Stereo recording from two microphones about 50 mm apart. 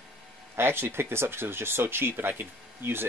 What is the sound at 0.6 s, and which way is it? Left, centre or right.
Speech, right.